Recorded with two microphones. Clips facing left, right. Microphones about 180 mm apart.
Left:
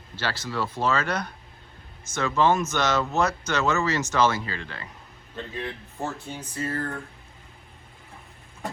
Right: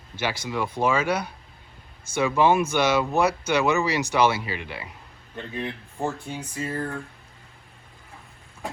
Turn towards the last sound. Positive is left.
turn(degrees=-10)  # may be behind; listen again after turning